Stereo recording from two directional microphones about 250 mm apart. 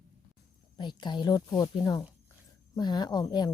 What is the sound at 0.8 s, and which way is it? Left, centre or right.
A woman's voice, centre.